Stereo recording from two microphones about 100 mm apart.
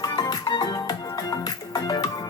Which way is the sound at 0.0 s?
40° left (ahead or behind).